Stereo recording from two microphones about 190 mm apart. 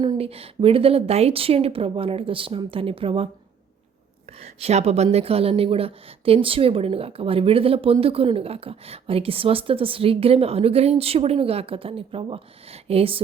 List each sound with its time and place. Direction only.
0.0 s a woman's voice: 25° right (ahead or behind)
4.3 s a woman's voice: 30° right (ahead or behind)